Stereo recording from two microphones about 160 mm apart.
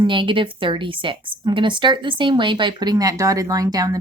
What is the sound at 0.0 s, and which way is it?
A woman's voice, 30° right (ahead or behind).